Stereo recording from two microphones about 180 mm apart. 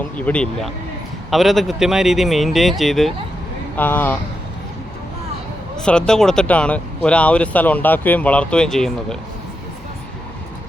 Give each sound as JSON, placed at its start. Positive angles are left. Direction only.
{"t": 0.2, "sound": "speech", "side_deg": 5}
{"t": 5.7, "sound": "speech", "side_deg": 5}